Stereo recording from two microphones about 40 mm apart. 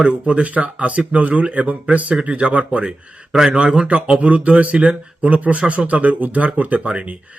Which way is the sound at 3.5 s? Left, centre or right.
Right.